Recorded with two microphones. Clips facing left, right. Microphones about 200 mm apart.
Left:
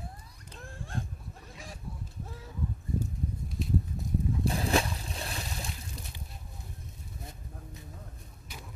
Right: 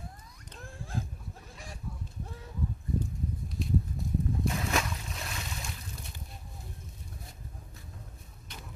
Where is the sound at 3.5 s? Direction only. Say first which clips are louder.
Even; centre (ahead or behind).